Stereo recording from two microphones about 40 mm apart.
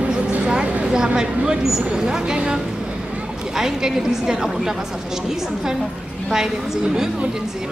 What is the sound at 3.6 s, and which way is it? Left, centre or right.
A woman's voice, centre.